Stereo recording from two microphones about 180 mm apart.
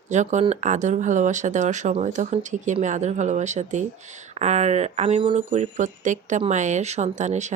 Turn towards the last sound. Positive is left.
turn(degrees=-40)  # may be behind; listen again after turning